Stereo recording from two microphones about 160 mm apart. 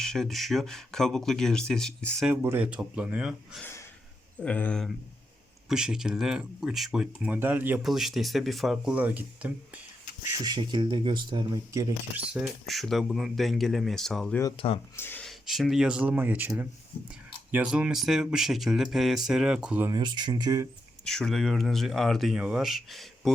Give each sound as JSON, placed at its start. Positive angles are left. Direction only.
{"t": 0.0, "sound": "speech", "side_deg": 5}
{"t": 2.2, "sound": "speech", "side_deg": -15}
{"t": 3.6, "sound": "a sound", "side_deg": 15}
{"t": 4.4, "sound": "speech", "side_deg": 10}
{"t": 5.6, "sound": "speech", "side_deg": -5}
{"t": 10.3, "sound": "speech", "side_deg": -25}
{"t": 12.1, "sound": "speech", "side_deg": -5}
{"t": 14.5, "sound": "speech", "side_deg": 35}
{"t": 14.9, "sound": "speech", "side_deg": 15}
{"t": 15.2, "sound": "speech", "side_deg": 0}
{"t": 19.9, "sound": "speech", "side_deg": -25}
{"t": 21.0, "sound": "speech", "side_deg": 5}